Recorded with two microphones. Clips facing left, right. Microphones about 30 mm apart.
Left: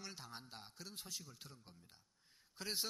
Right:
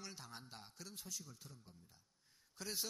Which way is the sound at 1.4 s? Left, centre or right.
Left.